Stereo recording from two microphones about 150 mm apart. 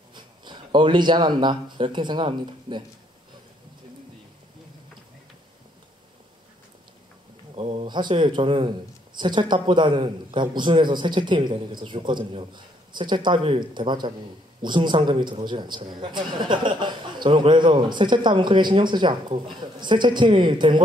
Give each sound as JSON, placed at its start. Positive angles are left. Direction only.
{"t": 0.1, "sound": "speech", "side_deg": -30}
{"t": 7.5, "sound": "a man's voice", "side_deg": -40}